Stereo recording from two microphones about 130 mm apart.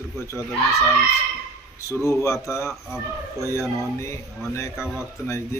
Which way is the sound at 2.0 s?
25° left (ahead or behind).